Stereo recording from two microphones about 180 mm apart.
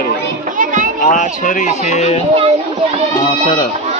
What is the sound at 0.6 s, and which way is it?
Children playing, 45° right (ahead or behind).